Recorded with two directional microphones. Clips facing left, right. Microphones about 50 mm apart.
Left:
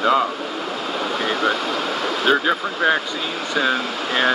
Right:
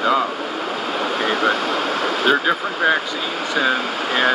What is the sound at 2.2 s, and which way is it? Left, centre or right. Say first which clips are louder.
Speech: even; centre.